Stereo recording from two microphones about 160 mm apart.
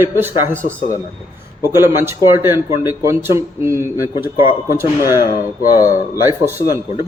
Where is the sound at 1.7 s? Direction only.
15° right (ahead or behind).